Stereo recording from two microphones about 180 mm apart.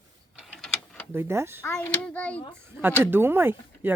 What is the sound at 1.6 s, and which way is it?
Speech, 10° left (ahead or behind).